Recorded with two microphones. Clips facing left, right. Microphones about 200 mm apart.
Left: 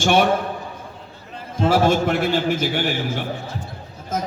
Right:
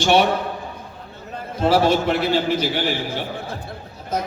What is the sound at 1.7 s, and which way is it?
A man's voice, 50° left (ahead or behind).